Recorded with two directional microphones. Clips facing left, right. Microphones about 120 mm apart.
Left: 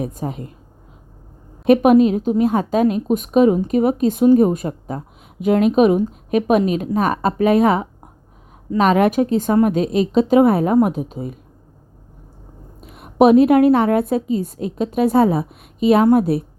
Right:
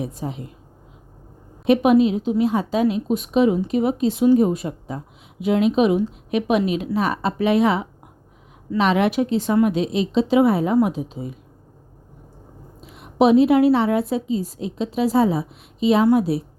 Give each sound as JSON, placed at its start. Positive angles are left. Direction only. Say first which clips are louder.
{"t": 0.0, "sound": "a woman's voice", "louder": "left 3 dB", "side_deg": 50}
{"t": 1.6, "sound": "a woman's voice", "louder": "left 3 dB", "side_deg": 50}
{"t": 12.8, "sound": "a woman's voice", "louder": "left 4 dB", "side_deg": 50}